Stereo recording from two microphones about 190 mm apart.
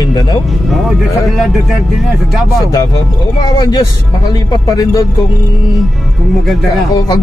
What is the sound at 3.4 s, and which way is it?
A man's voice, 20° left (ahead or behind).